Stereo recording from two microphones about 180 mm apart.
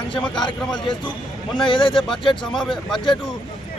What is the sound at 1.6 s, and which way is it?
Speech, 30° left (ahead or behind).